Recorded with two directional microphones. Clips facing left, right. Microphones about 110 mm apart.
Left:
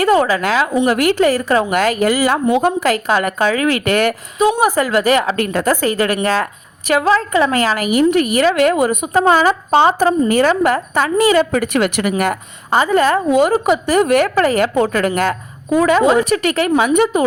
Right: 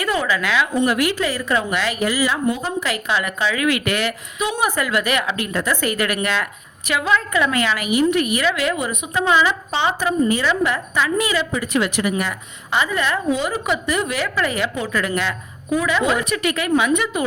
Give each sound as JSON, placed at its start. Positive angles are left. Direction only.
{"t": 0.0, "sound": "a woman's voice", "side_deg": 45}
{"t": 2.9, "sound": "a woman's voice", "side_deg": 45}
{"t": 10.2, "sound": "a woman's voice", "side_deg": 50}
{"t": 11.5, "sound": "a woman's voice", "side_deg": 60}